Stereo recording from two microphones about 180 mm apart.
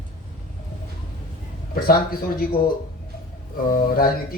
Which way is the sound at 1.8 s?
55° left (ahead or behind).